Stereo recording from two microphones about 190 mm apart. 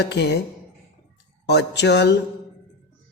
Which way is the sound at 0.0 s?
60° left (ahead or behind).